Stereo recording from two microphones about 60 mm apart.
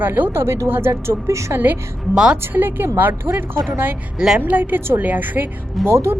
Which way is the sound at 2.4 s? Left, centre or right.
Right.